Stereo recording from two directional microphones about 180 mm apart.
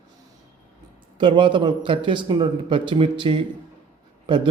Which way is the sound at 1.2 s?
25° right (ahead or behind).